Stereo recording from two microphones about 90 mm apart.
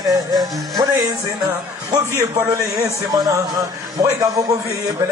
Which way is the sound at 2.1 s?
30° right (ahead or behind).